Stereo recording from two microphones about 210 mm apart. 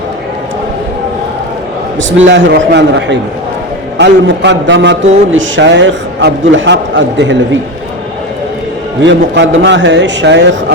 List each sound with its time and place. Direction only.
2.0 s a man's voice: 65° right (ahead or behind)
9.0 s a man's voice: 60° right (ahead or behind)